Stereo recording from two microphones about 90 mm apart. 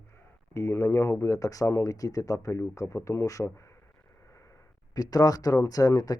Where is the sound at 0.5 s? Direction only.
30° left (ahead or behind).